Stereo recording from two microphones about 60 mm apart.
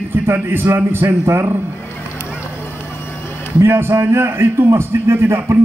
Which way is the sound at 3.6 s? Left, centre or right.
Right.